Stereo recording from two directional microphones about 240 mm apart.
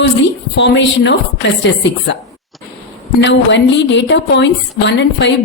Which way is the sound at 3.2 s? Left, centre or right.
Left.